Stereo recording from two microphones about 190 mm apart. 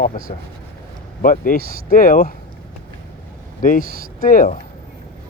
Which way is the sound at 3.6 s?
45° left (ahead or behind).